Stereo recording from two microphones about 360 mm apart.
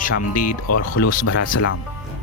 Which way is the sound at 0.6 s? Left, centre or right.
Left.